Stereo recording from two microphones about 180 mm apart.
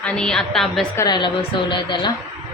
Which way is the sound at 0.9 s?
25° left (ahead or behind).